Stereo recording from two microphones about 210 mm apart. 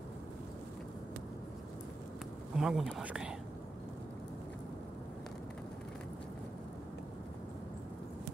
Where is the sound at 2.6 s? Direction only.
Centre (ahead or behind).